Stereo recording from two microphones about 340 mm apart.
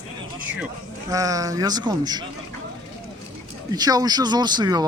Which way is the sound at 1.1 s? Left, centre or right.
Centre.